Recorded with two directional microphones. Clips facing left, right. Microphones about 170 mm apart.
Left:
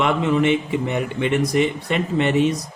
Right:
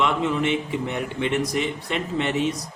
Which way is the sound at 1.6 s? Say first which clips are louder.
Left 6 dB; 60° left (ahead or behind).